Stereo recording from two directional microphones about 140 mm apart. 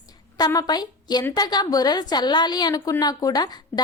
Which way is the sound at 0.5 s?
30° left (ahead or behind).